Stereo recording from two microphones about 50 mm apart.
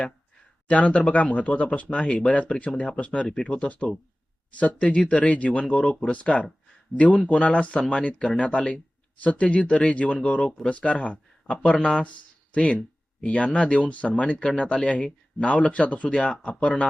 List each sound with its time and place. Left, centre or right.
0.7 s speech: left